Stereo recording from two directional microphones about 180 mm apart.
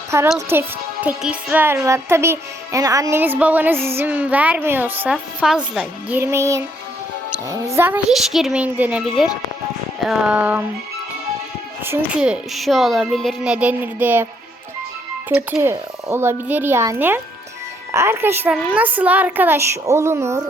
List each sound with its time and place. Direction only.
0.1 s a child's voice: 15° right (ahead or behind)
11.9 s speech: 5° right (ahead or behind)
15.3 s a child's voice: 5° right (ahead or behind)